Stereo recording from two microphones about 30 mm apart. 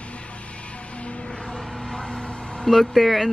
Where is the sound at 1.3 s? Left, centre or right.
Centre.